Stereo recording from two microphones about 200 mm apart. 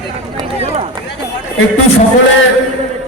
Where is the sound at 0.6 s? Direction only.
30° right (ahead or behind).